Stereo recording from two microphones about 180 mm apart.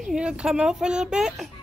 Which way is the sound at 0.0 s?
5° right (ahead or behind).